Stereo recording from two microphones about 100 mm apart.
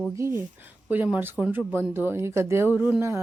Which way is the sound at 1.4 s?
5° left (ahead or behind).